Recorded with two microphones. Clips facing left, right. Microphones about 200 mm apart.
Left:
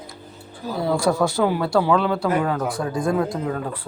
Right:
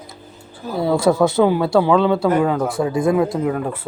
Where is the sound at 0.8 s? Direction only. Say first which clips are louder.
Right 5 dB; 25° right (ahead or behind).